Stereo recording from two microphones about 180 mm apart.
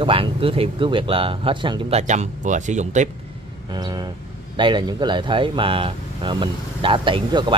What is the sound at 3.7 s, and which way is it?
Speech, 25° right (ahead or behind).